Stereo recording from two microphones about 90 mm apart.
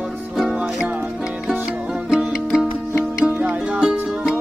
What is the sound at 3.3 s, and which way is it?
Music, 15° right (ahead or behind).